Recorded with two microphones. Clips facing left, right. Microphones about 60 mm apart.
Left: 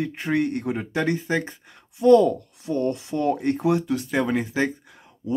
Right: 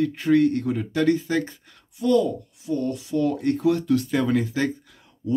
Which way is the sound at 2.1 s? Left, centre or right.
Left.